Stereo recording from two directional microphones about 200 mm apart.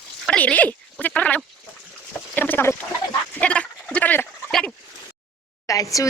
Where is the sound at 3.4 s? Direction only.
5° left (ahead or behind).